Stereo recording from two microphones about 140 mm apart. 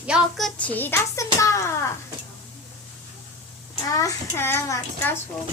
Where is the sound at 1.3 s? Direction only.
20° left (ahead or behind).